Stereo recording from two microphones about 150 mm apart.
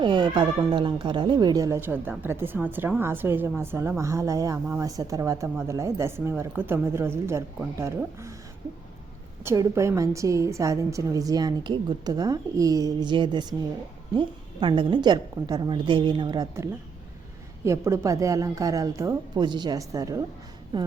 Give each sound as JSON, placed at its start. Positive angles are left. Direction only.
{"t": 0.0, "sound": "speech", "side_deg": -30}
{"t": 9.4, "sound": "a woman's voice", "side_deg": -20}
{"t": 17.6, "sound": "speech", "side_deg": -20}